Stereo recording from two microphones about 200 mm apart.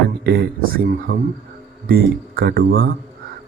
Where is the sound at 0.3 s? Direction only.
50° right (ahead or behind).